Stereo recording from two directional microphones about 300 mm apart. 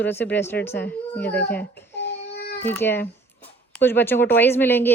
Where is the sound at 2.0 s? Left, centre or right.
Left.